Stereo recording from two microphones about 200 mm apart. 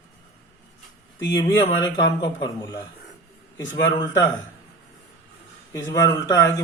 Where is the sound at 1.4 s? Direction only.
20° left (ahead or behind).